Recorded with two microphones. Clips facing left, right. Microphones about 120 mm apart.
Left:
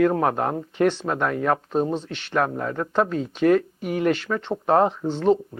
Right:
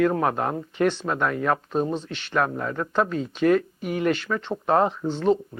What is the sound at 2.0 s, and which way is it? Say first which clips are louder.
Speech: left 1 dB; 50° left (ahead or behind).